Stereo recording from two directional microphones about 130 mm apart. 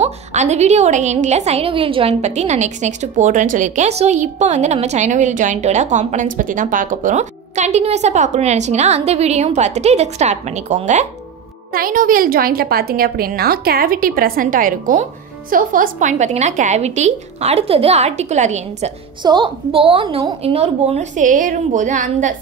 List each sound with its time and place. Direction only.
0.0 s a woman's voice: 60° right (ahead or behind); by 2.1 s 45° right (ahead or behind)
2.2 s a woman's voice: 60° right (ahead or behind)
11.8 s a woman's voice: 90° right
13.8 s a woman's voice: 90° right; by 18.9 s 65° right (ahead or behind)
19.2 s a woman's voice: 40° right (ahead or behind)
20.4 s a woman's voice: 55° right (ahead or behind); by 22.3 s 80° right